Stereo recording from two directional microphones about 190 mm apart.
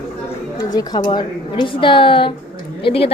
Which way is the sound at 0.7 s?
20° left (ahead or behind).